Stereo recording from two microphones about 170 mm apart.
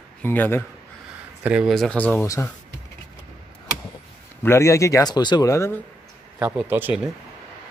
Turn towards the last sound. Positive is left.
turn(degrees=-10)  # may be behind; listen again after turning